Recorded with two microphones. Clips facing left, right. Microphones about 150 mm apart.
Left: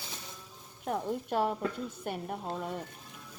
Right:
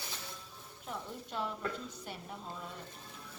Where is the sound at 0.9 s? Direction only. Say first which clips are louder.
Left 10 dB; 55° left (ahead or behind).